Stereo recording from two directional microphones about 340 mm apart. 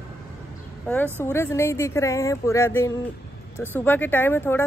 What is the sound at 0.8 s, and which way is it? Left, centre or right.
Speech, centre.